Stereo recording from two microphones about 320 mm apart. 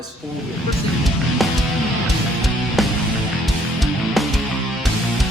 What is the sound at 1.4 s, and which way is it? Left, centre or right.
Music, centre.